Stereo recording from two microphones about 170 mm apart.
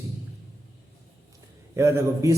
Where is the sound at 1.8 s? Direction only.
15° right (ahead or behind).